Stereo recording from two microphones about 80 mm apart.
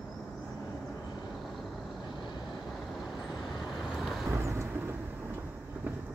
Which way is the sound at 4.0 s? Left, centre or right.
Centre.